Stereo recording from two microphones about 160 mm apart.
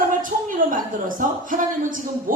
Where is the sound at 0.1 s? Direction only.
55° right (ahead or behind).